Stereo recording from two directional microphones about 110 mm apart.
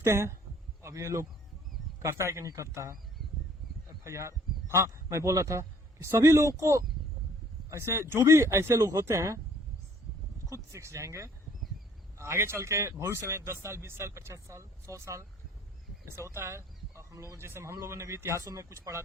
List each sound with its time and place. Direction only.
0.0 s speech: 25° right (ahead or behind)
4.0 s a man's voice: 25° right (ahead or behind)
10.5 s speech: 25° right (ahead or behind)